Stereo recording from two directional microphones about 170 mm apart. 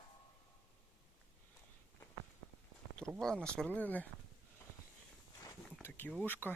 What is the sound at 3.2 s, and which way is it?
Speech, 5° left (ahead or behind).